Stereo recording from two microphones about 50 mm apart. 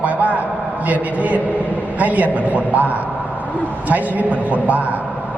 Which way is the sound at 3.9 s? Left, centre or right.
Right.